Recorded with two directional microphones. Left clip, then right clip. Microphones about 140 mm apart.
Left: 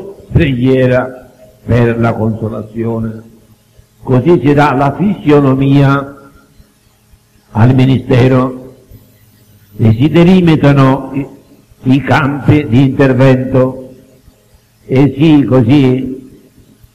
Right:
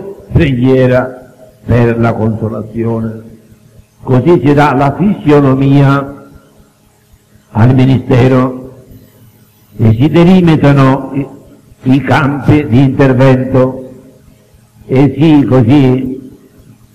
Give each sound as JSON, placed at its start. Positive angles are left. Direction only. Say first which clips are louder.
{"t": 0.3, "sound": "a man's voice", "louder": "right 1 dB", "side_deg": 45}
{"t": 7.5, "sound": "a man's voice", "louder": "right 1 dB", "side_deg": 45}
{"t": 9.8, "sound": "a man's voice", "louder": "right 1 dB", "side_deg": 45}
{"t": 14.9, "sound": "a man's voice", "louder": "right 1 dB", "side_deg": 45}